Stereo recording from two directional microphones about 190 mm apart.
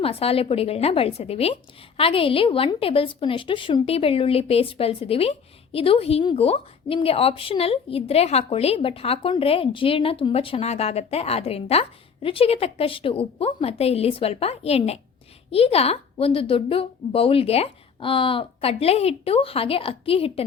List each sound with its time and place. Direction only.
0.0 s a woman's voice: 30° left (ahead or behind)